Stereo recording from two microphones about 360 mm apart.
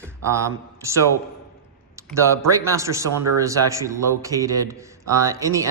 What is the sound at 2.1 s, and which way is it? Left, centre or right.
A man's voice, centre.